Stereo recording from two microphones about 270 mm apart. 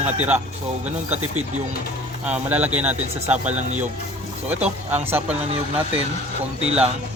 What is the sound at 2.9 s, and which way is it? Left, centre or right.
Speech, right.